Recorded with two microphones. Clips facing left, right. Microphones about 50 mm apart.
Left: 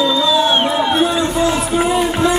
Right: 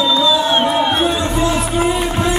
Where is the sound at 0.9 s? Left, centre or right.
Right.